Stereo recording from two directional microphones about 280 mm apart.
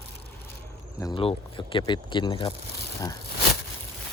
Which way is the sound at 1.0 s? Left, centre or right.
Centre.